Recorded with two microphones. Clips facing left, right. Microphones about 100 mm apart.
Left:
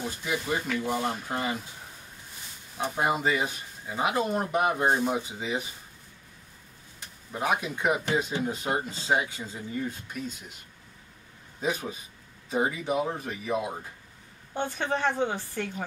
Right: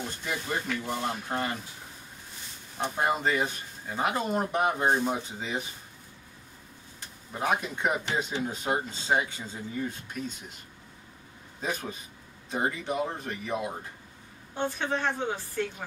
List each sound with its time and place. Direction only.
0.2 s a man's voice: 5° left (ahead or behind)
2.8 s a man's voice: 5° left (ahead or behind)
7.3 s a man's voice: 5° left (ahead or behind)
11.6 s a man's voice: 5° left (ahead or behind)
15.0 s a woman's voice: 15° left (ahead or behind)